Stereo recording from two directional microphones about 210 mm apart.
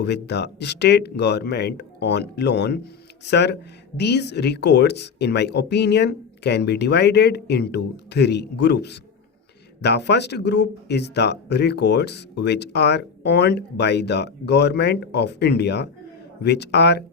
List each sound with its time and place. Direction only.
0.0 s speech: 55° left (ahead or behind)